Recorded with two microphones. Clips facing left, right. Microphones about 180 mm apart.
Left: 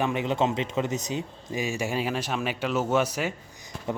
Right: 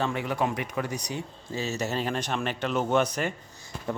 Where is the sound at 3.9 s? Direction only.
20° left (ahead or behind).